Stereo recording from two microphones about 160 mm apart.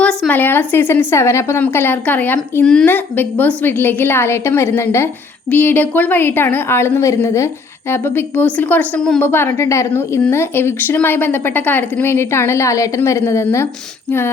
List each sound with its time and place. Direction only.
0.0 s a woman's voice: 5° left (ahead or behind)
9.3 s a woman's voice: 15° left (ahead or behind)